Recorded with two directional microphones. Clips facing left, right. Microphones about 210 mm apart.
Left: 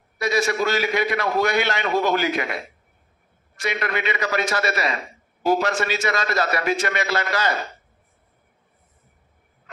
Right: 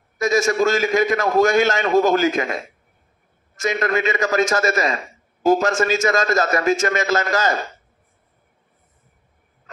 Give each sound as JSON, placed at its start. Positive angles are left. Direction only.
{"t": 0.2, "sound": "a man's voice", "side_deg": -45}
{"t": 3.6, "sound": "a man's voice", "side_deg": -45}